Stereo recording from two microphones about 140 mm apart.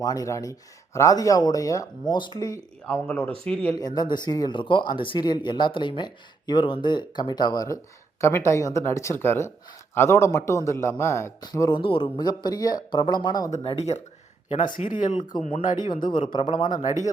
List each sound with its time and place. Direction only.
0.0 s a man's voice: 25° left (ahead or behind)
2.8 s speech: 5° left (ahead or behind)
3.8 s a man's voice: 30° left (ahead or behind)
11.8 s speech: 35° left (ahead or behind)
13.5 s speech: 45° left (ahead or behind)
14.5 s speech: 65° left (ahead or behind)
16.0 s a man's voice: 35° left (ahead or behind)